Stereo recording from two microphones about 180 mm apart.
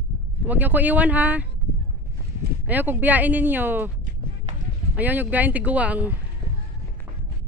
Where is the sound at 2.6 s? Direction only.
10° right (ahead or behind).